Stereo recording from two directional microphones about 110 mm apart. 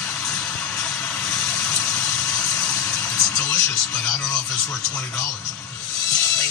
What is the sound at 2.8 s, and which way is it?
Music, 10° left (ahead or behind).